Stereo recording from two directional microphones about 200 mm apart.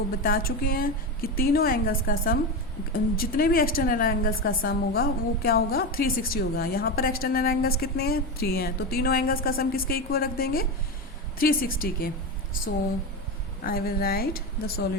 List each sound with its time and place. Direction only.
0.2 s a woman's voice: 45° left (ahead or behind)
13.7 s a woman's voice: 45° left (ahead or behind)